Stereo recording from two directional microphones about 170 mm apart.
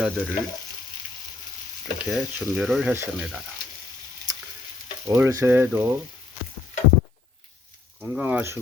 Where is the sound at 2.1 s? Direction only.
Centre (ahead or behind).